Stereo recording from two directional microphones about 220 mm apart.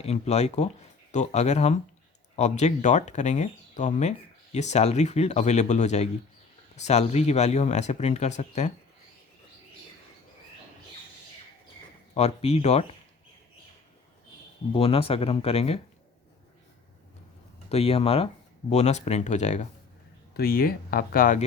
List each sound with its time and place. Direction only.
0.0 s speech: 30° left (ahead or behind)
12.1 s speech: 30° left (ahead or behind)
14.7 s speech: 25° left (ahead or behind)
17.7 s speech: 30° left (ahead or behind)
20.3 s speech: 45° left (ahead or behind)